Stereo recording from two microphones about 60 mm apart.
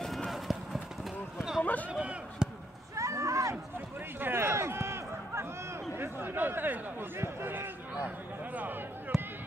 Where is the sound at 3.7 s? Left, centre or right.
Right.